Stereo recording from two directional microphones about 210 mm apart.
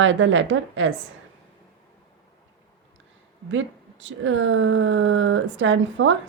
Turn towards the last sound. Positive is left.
turn(degrees=-65)  # may be behind; listen again after turning